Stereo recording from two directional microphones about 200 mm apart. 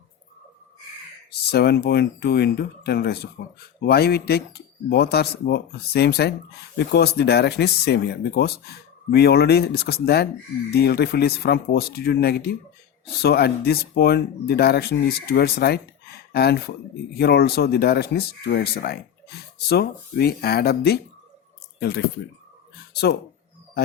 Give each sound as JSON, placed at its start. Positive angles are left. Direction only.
{"t": 1.3, "sound": "speech", "side_deg": 55}